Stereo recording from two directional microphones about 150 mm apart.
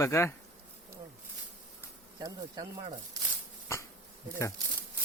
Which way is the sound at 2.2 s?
25° right (ahead or behind).